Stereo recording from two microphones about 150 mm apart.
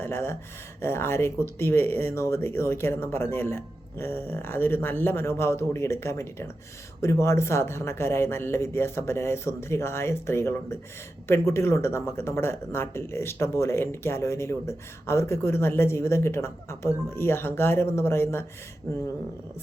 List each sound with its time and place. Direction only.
0.0 s speech: 15° left (ahead or behind)